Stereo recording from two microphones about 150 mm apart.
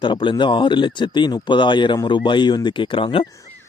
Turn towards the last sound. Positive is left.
turn(degrees=35)  # may be behind; listen again after turning